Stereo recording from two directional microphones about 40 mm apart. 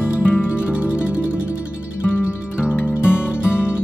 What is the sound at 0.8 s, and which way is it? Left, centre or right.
Music, right.